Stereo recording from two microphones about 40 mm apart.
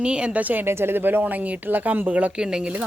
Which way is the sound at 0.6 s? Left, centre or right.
Right.